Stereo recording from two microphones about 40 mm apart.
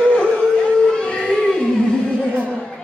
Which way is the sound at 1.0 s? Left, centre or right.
Left.